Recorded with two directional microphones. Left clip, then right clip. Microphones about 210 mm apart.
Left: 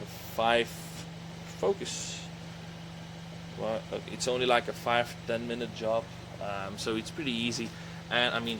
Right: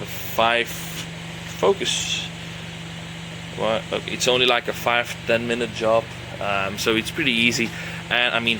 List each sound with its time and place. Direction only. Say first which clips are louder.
0.3 s speech: right 7 dB; 10° right (ahead or behind)
3.6 s speech: right 11 dB; 10° right (ahead or behind)